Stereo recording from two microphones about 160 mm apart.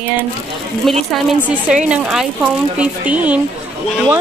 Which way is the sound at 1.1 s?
Centre (ahead or behind).